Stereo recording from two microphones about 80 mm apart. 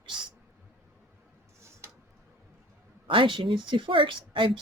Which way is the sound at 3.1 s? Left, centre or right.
Right.